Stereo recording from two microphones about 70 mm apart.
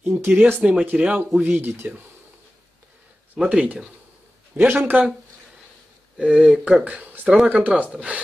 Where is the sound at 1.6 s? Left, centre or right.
Right.